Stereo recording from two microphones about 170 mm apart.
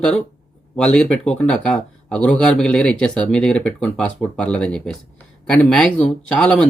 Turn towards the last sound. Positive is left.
turn(degrees=5)  # may be behind; listen again after turning